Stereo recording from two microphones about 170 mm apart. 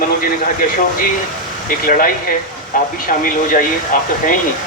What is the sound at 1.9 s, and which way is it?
Speech, 55° left (ahead or behind).